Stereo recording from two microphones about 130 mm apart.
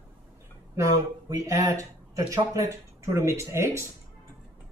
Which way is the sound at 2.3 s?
25° right (ahead or behind).